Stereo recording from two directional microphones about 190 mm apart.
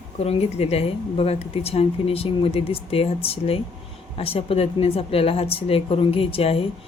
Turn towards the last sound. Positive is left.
turn(degrees=30)  # may be behind; listen again after turning